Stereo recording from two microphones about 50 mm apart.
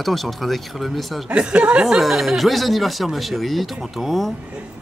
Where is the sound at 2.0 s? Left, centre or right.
Centre.